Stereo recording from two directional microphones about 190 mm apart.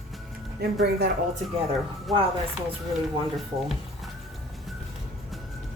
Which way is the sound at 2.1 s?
Centre (ahead or behind).